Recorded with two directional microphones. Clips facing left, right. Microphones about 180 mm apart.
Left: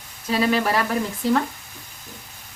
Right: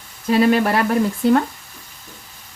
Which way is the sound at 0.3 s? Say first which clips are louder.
Right 6 dB; 50° right (ahead or behind).